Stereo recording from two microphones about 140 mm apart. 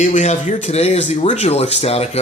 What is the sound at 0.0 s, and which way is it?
Speech, 55° left (ahead or behind).